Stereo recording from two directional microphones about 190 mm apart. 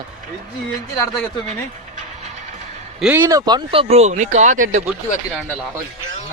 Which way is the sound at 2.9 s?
5° right (ahead or behind).